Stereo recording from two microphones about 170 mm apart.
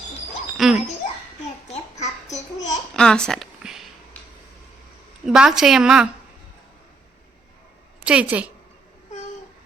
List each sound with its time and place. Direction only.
0.5 s a child's voice: centre (ahead or behind)
1.7 s babbling: 40° left (ahead or behind)
2.9 s a sound: 5° left (ahead or behind)
5.2 s a woman's voice: 5° right (ahead or behind)
8.0 s a woman's voice: 5° right (ahead or behind)